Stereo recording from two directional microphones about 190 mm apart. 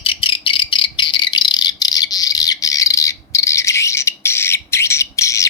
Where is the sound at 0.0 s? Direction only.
30° left (ahead or behind).